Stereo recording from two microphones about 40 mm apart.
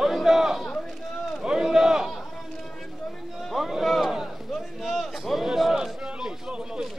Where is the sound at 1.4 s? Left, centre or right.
Centre.